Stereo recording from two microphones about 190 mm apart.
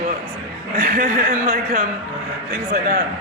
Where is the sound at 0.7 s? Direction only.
50° right (ahead or behind).